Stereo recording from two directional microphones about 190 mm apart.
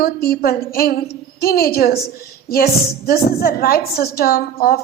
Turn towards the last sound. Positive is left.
turn(degrees=50)  # may be behind; listen again after turning